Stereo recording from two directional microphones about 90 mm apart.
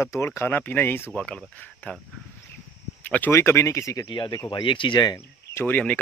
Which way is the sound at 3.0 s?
20° left (ahead or behind).